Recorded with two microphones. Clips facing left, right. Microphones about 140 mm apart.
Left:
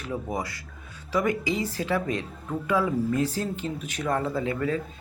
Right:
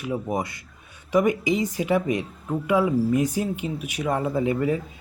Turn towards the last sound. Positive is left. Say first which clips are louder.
# right 4 dB
turn(degrees=-20)  # may be behind; listen again after turning